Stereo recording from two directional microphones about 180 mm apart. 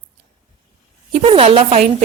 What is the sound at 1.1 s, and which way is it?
Speech, 35° right (ahead or behind).